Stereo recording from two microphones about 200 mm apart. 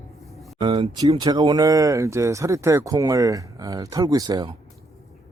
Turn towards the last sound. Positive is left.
turn(degrees=-20)  # may be behind; listen again after turning